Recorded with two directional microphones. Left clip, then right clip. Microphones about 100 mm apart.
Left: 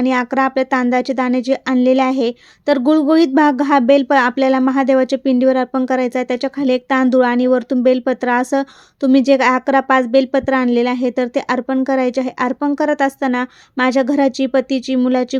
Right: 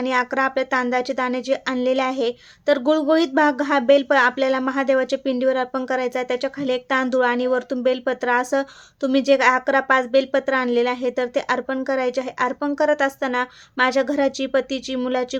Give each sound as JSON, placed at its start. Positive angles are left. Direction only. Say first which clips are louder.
{"t": 0.0, "sound": "speech", "louder": "left 4 dB", "side_deg": 55}